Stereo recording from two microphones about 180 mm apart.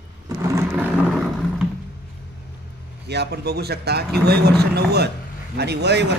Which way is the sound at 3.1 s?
65° right (ahead or behind).